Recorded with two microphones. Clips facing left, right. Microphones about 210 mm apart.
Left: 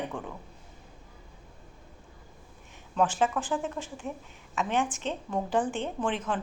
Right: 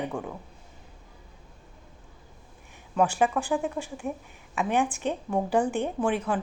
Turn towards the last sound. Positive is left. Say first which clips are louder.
# right 4 dB
turn(degrees=-10)  # may be behind; listen again after turning